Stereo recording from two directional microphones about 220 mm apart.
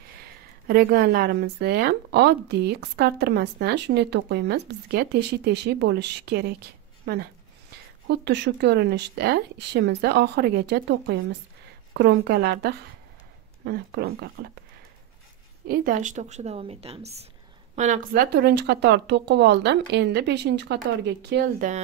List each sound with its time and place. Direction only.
0.2 s a woman's voice: 45° right (ahead or behind)
15.6 s a woman's voice: 40° right (ahead or behind)